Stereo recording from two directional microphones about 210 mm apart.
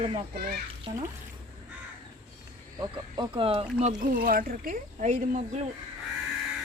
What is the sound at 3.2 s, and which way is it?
Speech, 25° right (ahead or behind).